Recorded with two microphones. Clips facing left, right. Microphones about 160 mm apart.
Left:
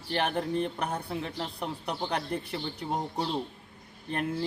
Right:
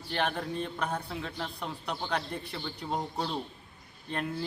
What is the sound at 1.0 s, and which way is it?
Speech, 30° left (ahead or behind).